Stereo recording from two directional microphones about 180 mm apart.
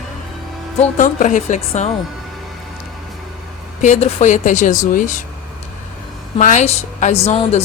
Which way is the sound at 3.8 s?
40° left (ahead or behind).